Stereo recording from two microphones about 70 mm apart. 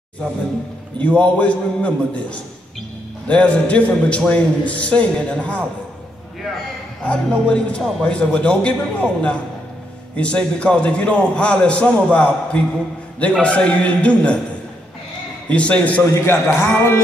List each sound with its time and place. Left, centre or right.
0.9 s a man's voice: centre
7.1 s a man's voice: centre
15.5 s a man's voice: centre
16.1 s speech: left